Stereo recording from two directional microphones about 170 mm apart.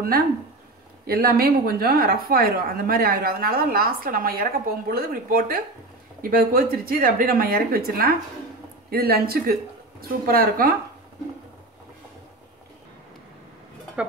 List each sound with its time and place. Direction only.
1.0 s speech: 60° right (ahead or behind)